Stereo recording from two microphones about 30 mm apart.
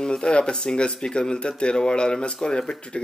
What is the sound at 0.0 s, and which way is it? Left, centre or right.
Speech, left.